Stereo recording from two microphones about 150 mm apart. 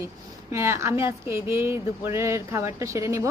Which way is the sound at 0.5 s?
20° right (ahead or behind).